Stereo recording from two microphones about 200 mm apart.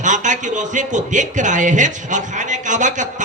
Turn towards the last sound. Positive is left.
turn(degrees=-40)  # may be behind; listen again after turning